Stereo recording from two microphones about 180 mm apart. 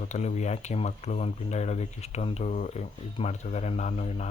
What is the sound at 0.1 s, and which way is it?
Speech, 40° left (ahead or behind).